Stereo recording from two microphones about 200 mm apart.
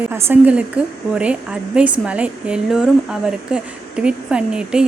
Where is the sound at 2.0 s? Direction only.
5° right (ahead or behind).